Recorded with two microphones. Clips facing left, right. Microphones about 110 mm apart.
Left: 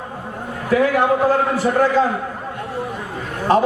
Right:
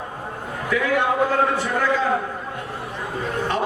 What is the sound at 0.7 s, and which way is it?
Speech, 40° left (ahead or behind).